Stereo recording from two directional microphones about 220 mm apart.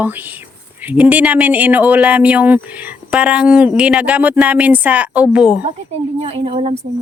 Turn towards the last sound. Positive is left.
turn(degrees=-25)  # may be behind; listen again after turning